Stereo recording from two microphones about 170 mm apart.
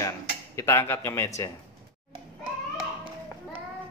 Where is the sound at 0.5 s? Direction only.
15° left (ahead or behind).